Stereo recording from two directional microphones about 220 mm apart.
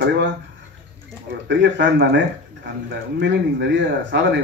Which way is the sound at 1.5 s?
55° right (ahead or behind).